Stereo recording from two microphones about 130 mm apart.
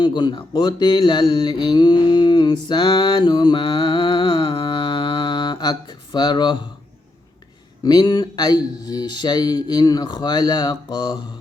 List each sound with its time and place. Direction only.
0.0 s mantra: 35° left (ahead or behind)
7.9 s speech: 30° left (ahead or behind)